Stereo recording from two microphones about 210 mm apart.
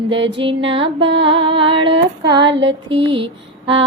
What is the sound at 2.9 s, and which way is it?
Speech, 25° right (ahead or behind).